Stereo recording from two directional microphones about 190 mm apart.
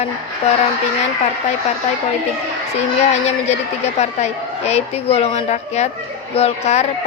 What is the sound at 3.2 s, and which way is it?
A woman's voice, 35° left (ahead or behind).